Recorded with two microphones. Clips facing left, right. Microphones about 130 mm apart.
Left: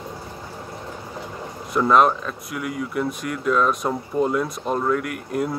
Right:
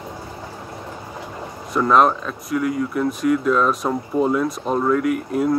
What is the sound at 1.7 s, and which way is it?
Speech, centre (ahead or behind).